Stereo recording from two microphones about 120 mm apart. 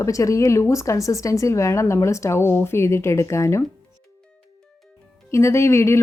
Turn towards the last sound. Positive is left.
turn(degrees=20)  # may be behind; listen again after turning